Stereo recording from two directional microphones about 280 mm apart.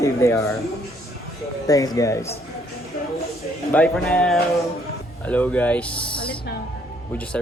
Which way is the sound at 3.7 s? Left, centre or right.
Centre.